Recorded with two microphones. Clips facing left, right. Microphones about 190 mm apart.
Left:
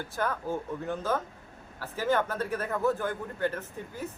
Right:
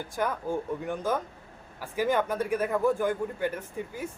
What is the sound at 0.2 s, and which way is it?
A man's voice, 15° right (ahead or behind).